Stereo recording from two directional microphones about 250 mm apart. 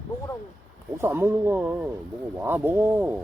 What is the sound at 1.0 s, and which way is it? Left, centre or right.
Speech, centre.